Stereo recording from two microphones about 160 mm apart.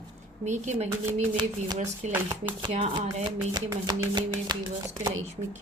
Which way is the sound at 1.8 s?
45° right (ahead or behind).